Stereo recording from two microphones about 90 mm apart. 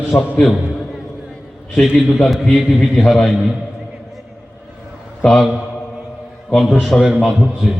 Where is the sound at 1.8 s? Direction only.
5° left (ahead or behind).